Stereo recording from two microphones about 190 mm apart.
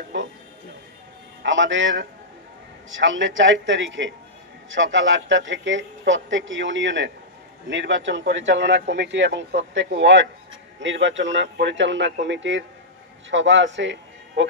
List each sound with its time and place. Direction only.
0.1 s music: 75° right (ahead or behind)
1.4 s speech: 75° right (ahead or behind)